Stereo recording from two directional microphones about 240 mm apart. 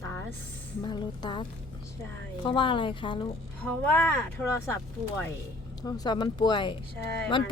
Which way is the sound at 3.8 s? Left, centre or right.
Centre.